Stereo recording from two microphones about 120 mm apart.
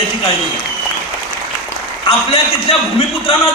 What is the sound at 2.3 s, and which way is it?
Speech, 50° left (ahead or behind).